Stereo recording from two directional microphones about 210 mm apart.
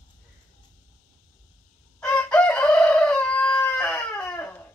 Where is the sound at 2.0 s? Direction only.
5° left (ahead or behind).